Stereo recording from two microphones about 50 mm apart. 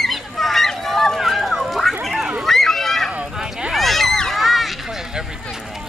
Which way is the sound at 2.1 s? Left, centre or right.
Centre.